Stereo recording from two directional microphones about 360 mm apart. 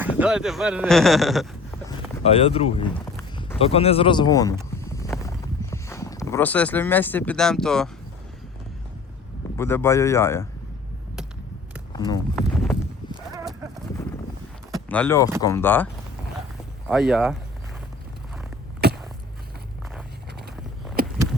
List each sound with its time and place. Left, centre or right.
0.0 s speech: centre
1.9 s speech: centre
4.9 s clip-clop: centre
5.7 s speech: centre
9.6 s speech: centre
11.9 s speech: centre
13.3 s clip-clop: centre
14.8 s speech: centre
16.9 s speech: centre
18.8 s a sound: right